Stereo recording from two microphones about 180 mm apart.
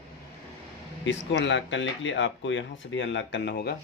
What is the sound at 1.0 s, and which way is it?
Speech, 85° left.